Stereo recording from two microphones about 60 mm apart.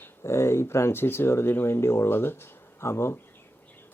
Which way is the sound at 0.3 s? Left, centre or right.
Left.